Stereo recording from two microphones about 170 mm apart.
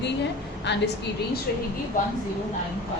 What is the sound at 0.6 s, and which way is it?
Speech, 90° left.